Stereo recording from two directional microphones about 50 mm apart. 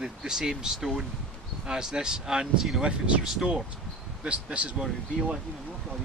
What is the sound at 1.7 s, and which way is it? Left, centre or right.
Speech, centre.